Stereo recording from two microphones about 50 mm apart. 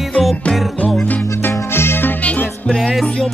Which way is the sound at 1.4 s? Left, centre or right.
Left.